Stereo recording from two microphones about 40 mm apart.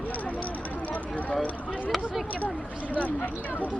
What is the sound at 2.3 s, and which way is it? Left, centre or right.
Speech, left.